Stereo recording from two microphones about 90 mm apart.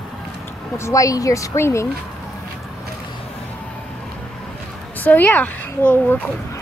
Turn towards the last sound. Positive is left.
turn(degrees=20)  # may be behind; listen again after turning